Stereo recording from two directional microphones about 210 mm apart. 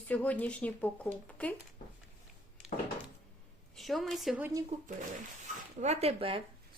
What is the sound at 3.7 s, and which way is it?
Speech, centre (ahead or behind).